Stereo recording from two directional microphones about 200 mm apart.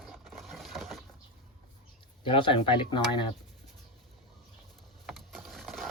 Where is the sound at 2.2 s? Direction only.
25° left (ahead or behind).